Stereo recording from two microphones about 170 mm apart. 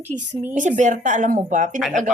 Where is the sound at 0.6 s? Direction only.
45° right (ahead or behind).